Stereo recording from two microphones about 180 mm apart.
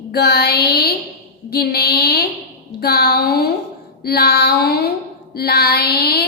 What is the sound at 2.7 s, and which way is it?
Child singing, 65° left (ahead or behind).